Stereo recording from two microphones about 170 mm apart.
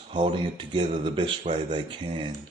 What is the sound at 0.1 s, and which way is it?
Speech, 30° right (ahead or behind).